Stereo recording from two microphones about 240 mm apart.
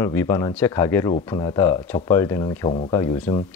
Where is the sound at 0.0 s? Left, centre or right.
Centre.